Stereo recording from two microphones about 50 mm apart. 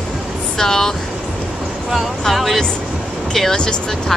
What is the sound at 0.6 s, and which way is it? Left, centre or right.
Speech, centre.